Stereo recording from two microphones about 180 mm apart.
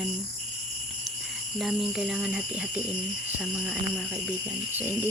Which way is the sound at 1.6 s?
5° right (ahead or behind).